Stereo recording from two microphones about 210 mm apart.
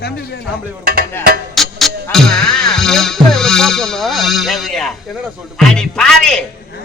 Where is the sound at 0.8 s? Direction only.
45° right (ahead or behind).